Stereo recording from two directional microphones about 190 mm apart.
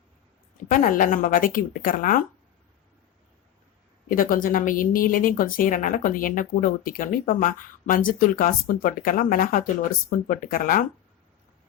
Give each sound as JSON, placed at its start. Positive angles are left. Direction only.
{"t": 0.7, "sound": "a woman's voice", "side_deg": 45}
{"t": 4.1, "sound": "a woman's voice", "side_deg": 45}